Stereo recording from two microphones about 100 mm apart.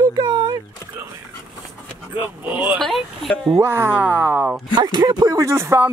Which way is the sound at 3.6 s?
25° right (ahead or behind).